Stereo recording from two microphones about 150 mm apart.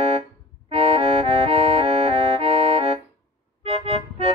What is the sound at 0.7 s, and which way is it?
Accordion, 40° right (ahead or behind).